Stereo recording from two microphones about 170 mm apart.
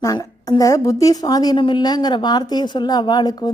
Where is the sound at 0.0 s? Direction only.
20° left (ahead or behind).